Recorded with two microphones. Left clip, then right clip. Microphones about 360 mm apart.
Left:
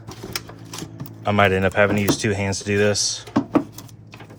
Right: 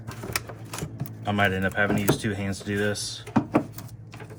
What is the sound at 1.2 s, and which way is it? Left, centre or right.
Speech, centre.